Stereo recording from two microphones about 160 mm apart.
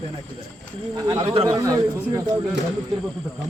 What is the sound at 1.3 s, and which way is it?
Speech, 35° right (ahead or behind).